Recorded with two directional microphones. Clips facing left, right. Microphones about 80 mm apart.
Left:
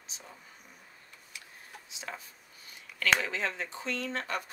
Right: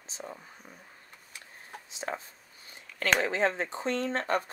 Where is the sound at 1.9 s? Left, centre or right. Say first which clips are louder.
Right 7 dB; right.